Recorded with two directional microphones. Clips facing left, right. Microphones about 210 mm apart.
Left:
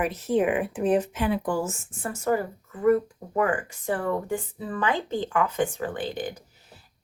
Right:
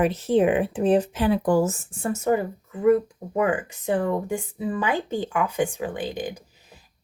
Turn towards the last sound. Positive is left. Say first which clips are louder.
# right 4 dB
turn(degrees=-15)  # may be behind; listen again after turning